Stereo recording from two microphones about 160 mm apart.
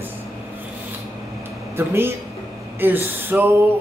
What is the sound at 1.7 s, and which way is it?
Speech, 15° right (ahead or behind).